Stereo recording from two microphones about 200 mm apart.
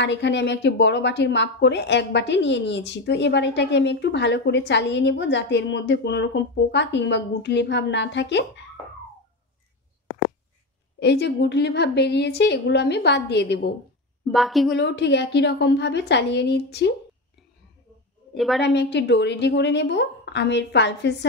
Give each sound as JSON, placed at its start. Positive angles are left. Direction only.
{"t": 0.0, "sound": "speech", "side_deg": 60}
{"t": 11.0, "sound": "speech", "side_deg": 55}
{"t": 14.3, "sound": "a woman's voice", "side_deg": 0}
{"t": 14.8, "sound": "speech", "side_deg": 60}
{"t": 18.3, "sound": "a woman's voice", "side_deg": 0}
{"t": 18.6, "sound": "speech", "side_deg": 60}